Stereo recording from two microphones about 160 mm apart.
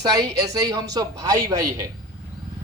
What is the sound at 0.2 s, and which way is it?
A man's voice, 20° right (ahead or behind).